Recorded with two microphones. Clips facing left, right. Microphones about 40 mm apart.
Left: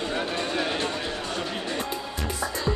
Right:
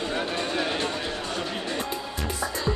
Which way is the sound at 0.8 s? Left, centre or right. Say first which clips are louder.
Even; right.